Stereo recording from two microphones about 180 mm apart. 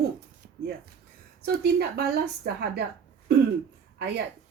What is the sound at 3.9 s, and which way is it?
Speech, 65° right (ahead or behind).